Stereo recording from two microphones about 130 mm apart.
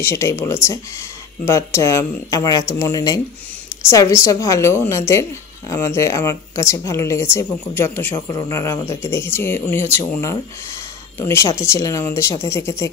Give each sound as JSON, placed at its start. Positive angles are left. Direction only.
{"t": 0.0, "sound": "a woman's voice", "side_deg": 20}
{"t": 8.3, "sound": "a woman's voice", "side_deg": 25}